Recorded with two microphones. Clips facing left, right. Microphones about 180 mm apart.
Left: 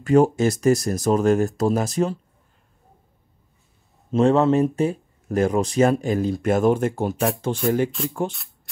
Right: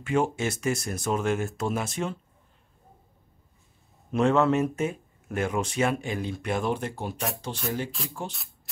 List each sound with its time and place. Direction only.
0.0 s speech: 40° left (ahead or behind)
4.1 s speech: 35° left (ahead or behind); by 7.9 s 50° left (ahead or behind)